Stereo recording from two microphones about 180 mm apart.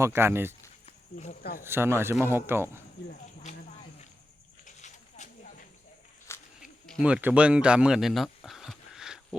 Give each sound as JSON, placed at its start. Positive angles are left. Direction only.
{"t": 0.0, "sound": "speech", "side_deg": -15}
{"t": 0.9, "sound": "cricket", "side_deg": 40}
{"t": 1.6, "sound": "speech", "side_deg": -15}
{"t": 4.6, "sound": "snake", "side_deg": 40}
{"t": 6.6, "sound": "a sound", "side_deg": 0}